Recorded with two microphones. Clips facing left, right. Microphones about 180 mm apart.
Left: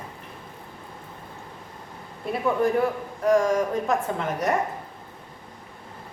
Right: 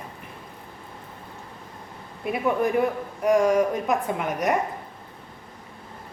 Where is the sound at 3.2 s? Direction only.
10° right (ahead or behind).